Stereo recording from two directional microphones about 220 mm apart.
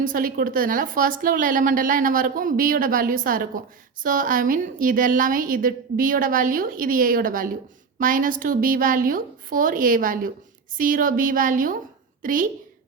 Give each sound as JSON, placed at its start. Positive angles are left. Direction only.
{"t": 0.1, "sound": "a woman's voice", "side_deg": -40}